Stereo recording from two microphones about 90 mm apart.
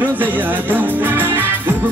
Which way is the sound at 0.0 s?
20° right (ahead or behind).